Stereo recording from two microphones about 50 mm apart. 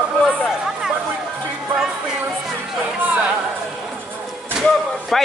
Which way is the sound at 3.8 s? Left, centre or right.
Centre.